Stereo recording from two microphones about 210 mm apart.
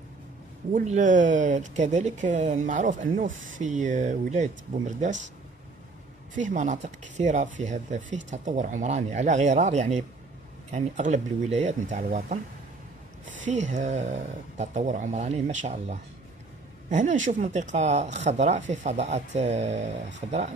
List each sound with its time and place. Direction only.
0.7 s speech: 35° right (ahead or behind)
6.3 s speech: 35° right (ahead or behind)
13.4 s speech: 35° right (ahead or behind)